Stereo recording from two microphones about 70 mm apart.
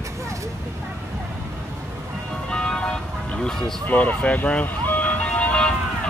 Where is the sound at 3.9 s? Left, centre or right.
Left.